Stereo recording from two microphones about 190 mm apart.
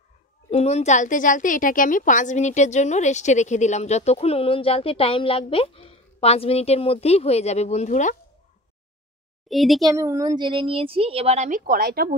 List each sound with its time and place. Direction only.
0.5 s a woman's voice: 35° left (ahead or behind)
9.5 s a child's voice: centre (ahead or behind)
9.9 s a woman's voice: 15° right (ahead or behind); by 12.2 s 50° right (ahead or behind)